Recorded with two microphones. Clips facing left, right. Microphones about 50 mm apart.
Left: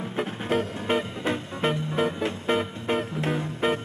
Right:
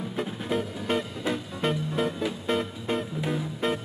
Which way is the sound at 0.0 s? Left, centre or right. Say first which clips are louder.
Left 2 dB; left.